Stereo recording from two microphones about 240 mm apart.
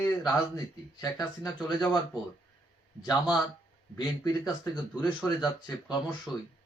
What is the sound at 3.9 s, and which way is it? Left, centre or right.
Speech, centre.